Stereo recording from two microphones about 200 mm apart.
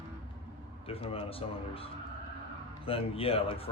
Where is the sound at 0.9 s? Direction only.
30° left (ahead or behind).